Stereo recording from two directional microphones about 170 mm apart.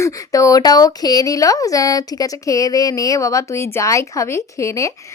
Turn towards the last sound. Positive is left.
turn(degrees=20)  # may be behind; listen again after turning